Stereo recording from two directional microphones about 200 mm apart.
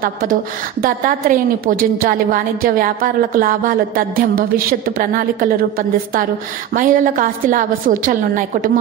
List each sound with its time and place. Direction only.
0.0 s a woman's voice: 45° right (ahead or behind)